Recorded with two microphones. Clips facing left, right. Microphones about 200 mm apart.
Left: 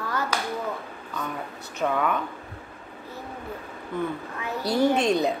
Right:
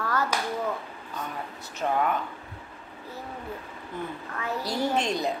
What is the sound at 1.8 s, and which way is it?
Speech, 60° left (ahead or behind).